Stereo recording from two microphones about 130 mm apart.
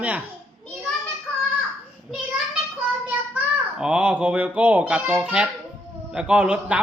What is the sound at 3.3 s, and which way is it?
A child's voice, 5° right (ahead or behind).